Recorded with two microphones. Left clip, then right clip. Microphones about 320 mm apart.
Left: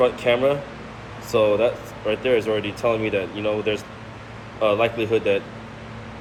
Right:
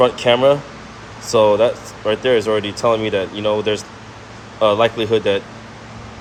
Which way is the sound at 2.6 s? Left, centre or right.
Right.